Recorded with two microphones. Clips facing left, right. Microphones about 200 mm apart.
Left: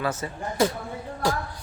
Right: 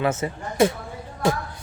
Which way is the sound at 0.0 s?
25° right (ahead or behind).